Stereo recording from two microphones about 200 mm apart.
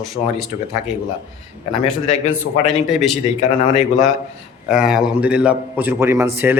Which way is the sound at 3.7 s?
30° left (ahead or behind).